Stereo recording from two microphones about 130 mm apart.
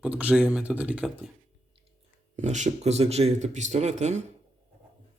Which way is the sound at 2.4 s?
65° right (ahead or behind).